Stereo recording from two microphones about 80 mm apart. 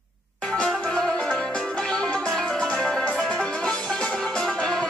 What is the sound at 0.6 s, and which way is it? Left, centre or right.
Music, centre.